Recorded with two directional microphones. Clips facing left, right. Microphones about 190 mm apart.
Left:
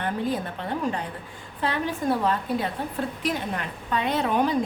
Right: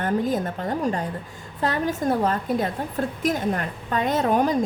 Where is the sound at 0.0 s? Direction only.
45° right (ahead or behind).